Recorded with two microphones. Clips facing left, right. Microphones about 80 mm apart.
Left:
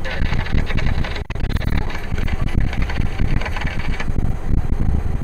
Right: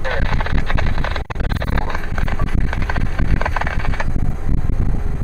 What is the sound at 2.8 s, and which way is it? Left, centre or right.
Vehicle, right.